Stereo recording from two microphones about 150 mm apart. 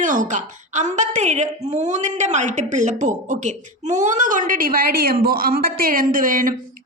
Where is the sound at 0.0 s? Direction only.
60° right (ahead or behind).